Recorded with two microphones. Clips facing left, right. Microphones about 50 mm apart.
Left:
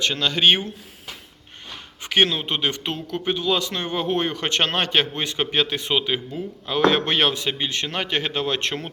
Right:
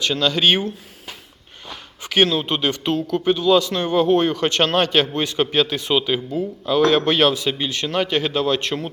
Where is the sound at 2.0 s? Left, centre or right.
Left.